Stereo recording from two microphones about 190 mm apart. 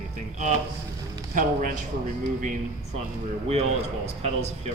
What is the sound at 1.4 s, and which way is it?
Speech, 45° right (ahead or behind).